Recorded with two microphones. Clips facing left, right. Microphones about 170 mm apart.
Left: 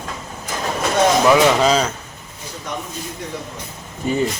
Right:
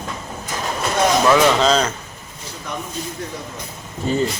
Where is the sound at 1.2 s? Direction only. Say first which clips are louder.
Even; 10° left (ahead or behind).